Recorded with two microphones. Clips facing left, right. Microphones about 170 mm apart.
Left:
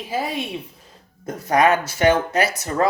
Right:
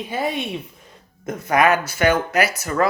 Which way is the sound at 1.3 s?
35° left (ahead or behind).